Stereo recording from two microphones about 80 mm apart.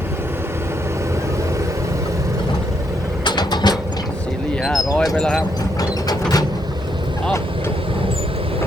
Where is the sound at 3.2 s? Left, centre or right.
Left.